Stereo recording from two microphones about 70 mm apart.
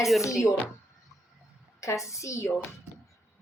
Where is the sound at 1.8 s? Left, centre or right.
Left.